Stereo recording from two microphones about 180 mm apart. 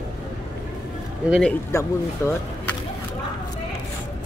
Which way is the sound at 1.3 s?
5° left (ahead or behind).